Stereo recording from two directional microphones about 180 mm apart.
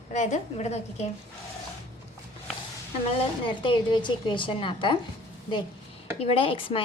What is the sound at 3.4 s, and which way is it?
Speech, 30° left (ahead or behind).